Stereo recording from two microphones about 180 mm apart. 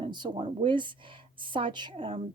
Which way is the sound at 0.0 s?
25° right (ahead or behind).